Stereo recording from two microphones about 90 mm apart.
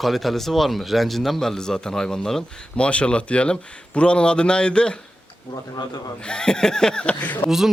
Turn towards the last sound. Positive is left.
turn(degrees=-5)  # may be behind; listen again after turning